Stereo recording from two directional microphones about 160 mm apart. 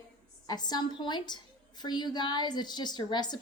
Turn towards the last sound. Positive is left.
turn(degrees=25)  # may be behind; listen again after turning